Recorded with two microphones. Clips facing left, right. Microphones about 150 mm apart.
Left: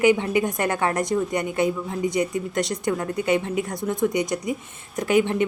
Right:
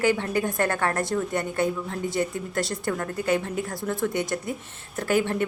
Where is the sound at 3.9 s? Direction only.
15° left (ahead or behind).